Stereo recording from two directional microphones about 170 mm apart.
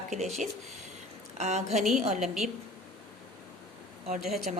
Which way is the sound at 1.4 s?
40° right (ahead or behind).